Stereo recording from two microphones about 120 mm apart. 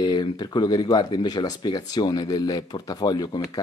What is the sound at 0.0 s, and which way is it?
Speech, 35° left (ahead or behind).